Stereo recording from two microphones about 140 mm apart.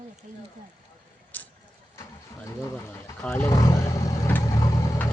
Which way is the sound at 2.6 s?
20° left (ahead or behind).